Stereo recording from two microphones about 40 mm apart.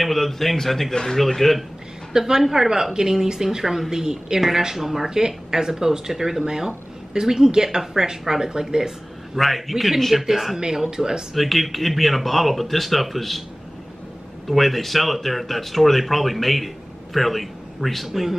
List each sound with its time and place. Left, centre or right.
0.0 s speech: centre
2.1 s speech: centre
9.4 s speech: centre
11.3 s speech: centre
14.5 s speech: centre